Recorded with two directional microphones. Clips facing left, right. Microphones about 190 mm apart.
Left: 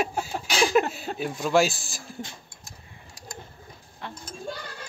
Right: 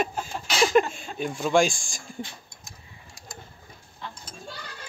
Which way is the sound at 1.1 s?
5° left (ahead or behind).